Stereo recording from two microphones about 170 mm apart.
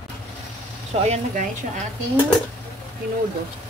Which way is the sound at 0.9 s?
45° right (ahead or behind).